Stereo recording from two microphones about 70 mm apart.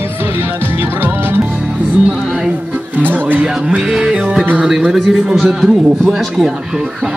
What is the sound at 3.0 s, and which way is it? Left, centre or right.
Speech, right.